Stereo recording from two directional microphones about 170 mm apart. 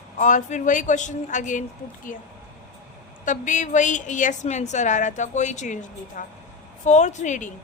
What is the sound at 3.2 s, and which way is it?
A woman's voice, 50° left (ahead or behind).